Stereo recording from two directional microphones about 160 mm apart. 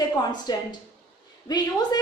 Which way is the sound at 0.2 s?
25° left (ahead or behind).